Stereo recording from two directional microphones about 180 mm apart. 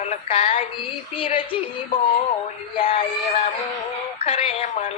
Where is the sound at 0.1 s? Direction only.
35° left (ahead or behind).